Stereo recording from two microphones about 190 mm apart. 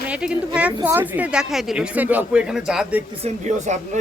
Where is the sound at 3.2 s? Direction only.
40° right (ahead or behind).